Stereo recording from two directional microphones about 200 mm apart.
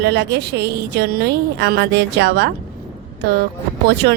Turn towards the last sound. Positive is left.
turn(degrees=-55)  # may be behind; listen again after turning